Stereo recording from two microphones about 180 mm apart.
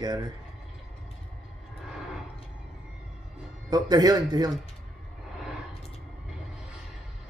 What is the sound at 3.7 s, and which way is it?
Speech, 20° right (ahead or behind).